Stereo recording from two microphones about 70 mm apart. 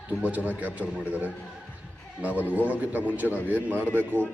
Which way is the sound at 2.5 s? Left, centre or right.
Right.